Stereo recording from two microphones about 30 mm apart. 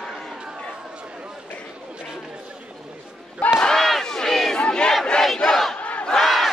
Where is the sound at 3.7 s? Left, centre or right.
Centre.